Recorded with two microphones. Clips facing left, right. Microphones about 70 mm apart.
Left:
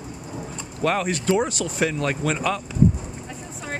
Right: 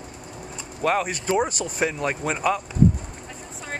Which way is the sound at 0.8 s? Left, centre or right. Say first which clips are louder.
Even; centre.